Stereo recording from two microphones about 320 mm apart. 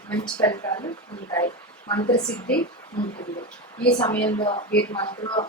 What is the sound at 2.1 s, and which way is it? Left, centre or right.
Speech, left.